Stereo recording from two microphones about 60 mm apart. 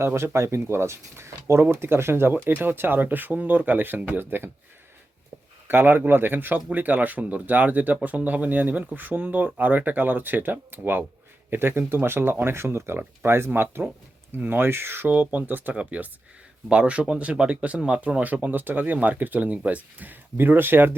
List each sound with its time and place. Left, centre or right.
0.0 s speech: right
5.6 s speech: right